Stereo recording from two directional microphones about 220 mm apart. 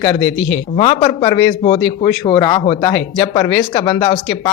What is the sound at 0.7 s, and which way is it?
Speech, 25° left (ahead or behind).